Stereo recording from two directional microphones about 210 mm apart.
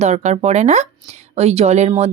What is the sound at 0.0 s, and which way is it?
A woman's voice, 35° right (ahead or behind).